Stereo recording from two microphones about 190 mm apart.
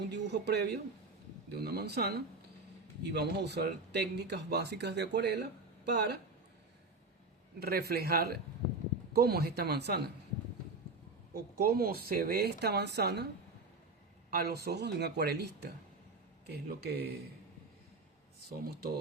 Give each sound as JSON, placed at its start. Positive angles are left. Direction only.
{"t": 0.1, "sound": "speech", "side_deg": -65}
{"t": 7.6, "sound": "speech", "side_deg": -55}
{"t": 11.3, "sound": "speech", "side_deg": -55}
{"t": 14.3, "sound": "speech", "side_deg": -55}
{"t": 18.4, "sound": "speech", "side_deg": -55}